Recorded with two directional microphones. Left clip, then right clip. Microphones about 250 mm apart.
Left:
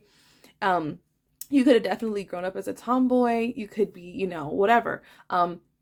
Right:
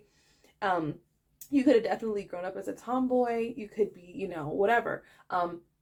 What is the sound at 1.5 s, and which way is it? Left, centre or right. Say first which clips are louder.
Speech: left 4 dB; left.